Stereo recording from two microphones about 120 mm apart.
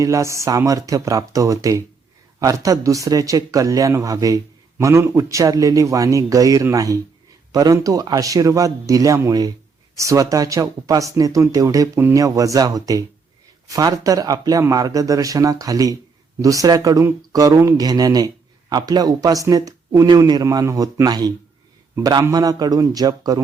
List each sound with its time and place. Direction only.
0.0 s a man's voice: 25° right (ahead or behind)